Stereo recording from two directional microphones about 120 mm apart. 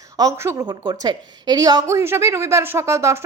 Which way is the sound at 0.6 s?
40° right (ahead or behind).